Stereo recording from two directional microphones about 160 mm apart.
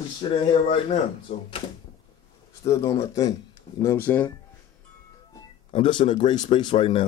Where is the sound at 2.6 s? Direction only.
20° left (ahead or behind).